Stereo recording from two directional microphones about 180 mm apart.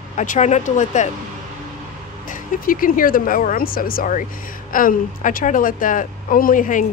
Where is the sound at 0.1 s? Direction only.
40° left (ahead or behind).